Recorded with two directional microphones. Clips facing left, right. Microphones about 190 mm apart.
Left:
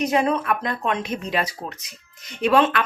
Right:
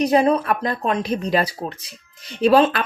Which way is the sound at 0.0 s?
35° right (ahead or behind).